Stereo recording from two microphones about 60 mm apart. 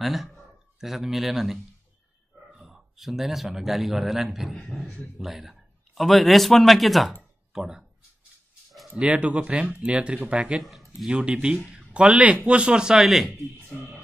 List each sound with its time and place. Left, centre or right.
0.0 s a man's voice: centre
7.5 s speech: centre
8.9 s speech: centre
10.6 s speech: centre
11.1 s speech: centre